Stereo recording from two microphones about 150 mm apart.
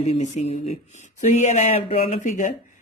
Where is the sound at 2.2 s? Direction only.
60° left (ahead or behind).